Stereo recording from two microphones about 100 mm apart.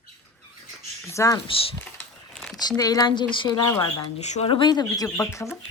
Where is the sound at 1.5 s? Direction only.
65° left (ahead or behind).